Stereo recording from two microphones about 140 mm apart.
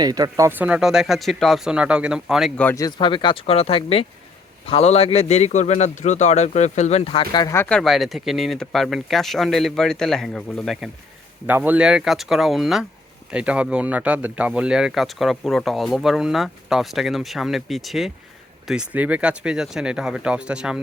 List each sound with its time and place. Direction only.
0.0 s speech: 30° right (ahead or behind); by 2.5 s 5° right (ahead or behind)
2.7 s a man's voice: 30° left (ahead or behind)
7.4 s speech: 20° left (ahead or behind)
7.7 s speech: centre (ahead or behind)
11.4 s speech: 15° right (ahead or behind)